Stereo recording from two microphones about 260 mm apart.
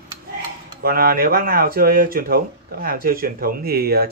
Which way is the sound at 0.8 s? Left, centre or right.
Right.